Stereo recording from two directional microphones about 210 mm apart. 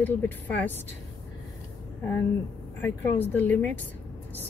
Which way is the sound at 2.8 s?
10° left (ahead or behind).